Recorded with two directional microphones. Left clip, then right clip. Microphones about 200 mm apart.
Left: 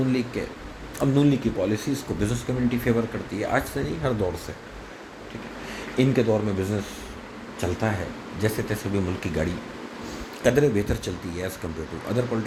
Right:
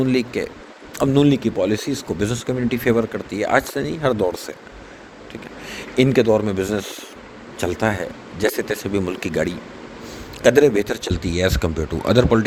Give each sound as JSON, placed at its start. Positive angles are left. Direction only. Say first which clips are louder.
{"t": 0.1, "sound": "speech", "louder": "right 6 dB", "side_deg": -45}
{"t": 6.0, "sound": "speech", "louder": "right 7 dB", "side_deg": -40}